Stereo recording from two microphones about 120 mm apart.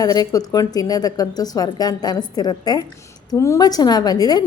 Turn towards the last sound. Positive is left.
turn(degrees=35)  # may be behind; listen again after turning